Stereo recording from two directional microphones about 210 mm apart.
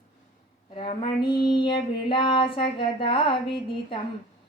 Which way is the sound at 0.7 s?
25° left (ahead or behind).